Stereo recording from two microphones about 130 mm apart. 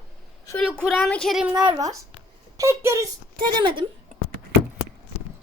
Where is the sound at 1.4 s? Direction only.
10° right (ahead or behind).